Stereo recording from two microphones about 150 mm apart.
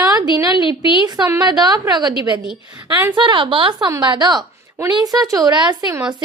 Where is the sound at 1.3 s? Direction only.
25° right (ahead or behind).